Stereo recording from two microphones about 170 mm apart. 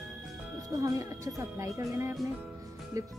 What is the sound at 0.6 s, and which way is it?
Speech, 20° right (ahead or behind).